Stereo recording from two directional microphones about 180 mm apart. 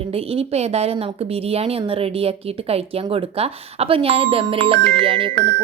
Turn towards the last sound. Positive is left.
turn(degrees=-30)  # may be behind; listen again after turning